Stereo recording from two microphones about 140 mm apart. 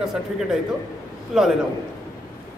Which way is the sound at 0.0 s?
5° right (ahead or behind).